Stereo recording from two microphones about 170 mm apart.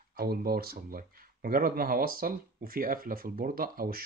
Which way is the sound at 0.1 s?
65° right (ahead or behind).